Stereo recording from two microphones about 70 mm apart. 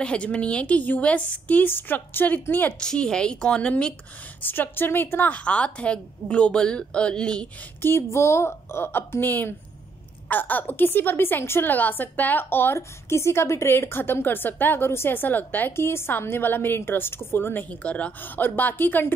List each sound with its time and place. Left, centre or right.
0.0 s a woman's voice: centre
2.8 s a woman's voice: centre
4.4 s a woman's voice: left; by 7.4 s centre
7.8 s a woman's voice: left
17.6 s a woman's voice: centre